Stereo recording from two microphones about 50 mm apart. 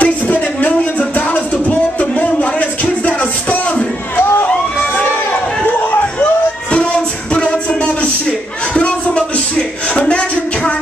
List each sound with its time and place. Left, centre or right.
0.0 s music: left
6.7 s music: left